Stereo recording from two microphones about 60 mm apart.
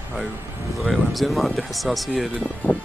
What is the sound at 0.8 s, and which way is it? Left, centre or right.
Speech, centre.